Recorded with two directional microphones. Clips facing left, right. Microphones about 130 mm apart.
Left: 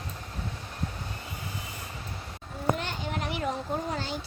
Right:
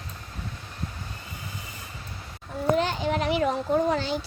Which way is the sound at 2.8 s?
90° right.